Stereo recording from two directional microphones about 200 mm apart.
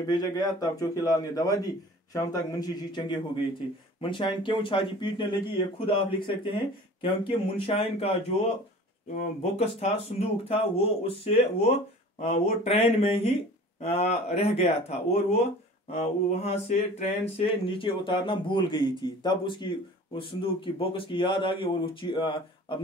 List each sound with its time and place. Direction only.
0.1 s a man's voice: 20° left (ahead or behind)